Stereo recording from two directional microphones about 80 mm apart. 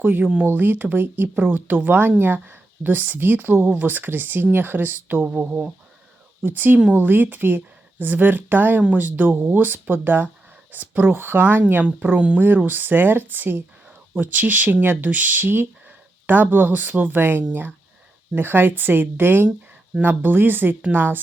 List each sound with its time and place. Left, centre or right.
0.0 s speech: right